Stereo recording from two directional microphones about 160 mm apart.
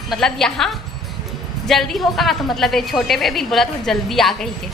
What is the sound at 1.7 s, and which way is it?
A woman's voice, centre (ahead or behind).